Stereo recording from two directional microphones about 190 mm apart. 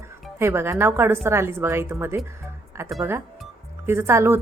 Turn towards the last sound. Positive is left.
turn(degrees=-15)  # may be behind; listen again after turning